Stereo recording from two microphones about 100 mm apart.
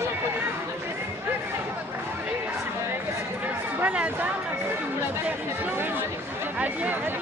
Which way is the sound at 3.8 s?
15° right (ahead or behind).